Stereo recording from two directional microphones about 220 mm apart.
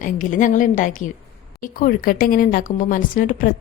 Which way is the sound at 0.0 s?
35° left (ahead or behind).